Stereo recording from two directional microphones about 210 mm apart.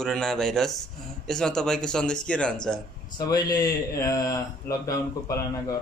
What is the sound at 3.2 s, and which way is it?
Speech, 20° left (ahead or behind).